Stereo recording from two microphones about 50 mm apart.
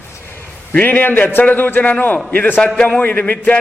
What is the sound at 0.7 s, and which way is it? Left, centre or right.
A man's voice, left.